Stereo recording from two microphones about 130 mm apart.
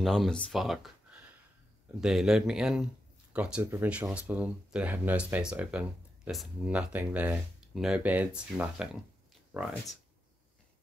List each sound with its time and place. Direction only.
0.0 s speech: centre (ahead or behind)